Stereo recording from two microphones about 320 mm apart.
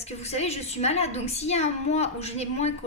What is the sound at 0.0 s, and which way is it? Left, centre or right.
A woman's voice, centre.